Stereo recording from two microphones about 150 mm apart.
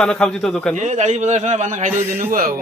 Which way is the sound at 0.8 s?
50° right (ahead or behind).